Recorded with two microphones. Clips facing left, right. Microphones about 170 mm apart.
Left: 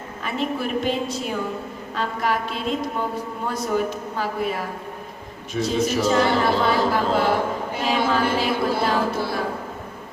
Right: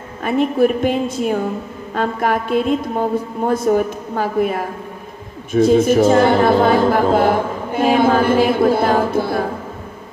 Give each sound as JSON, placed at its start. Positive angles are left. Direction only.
{"t": 0.2, "sound": "a man's voice", "side_deg": -50}